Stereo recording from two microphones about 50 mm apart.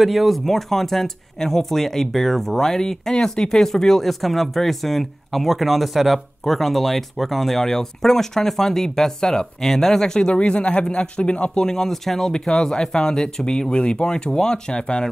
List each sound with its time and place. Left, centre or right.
0.0 s speech: centre; by 11.6 s left
11.6 s speech: centre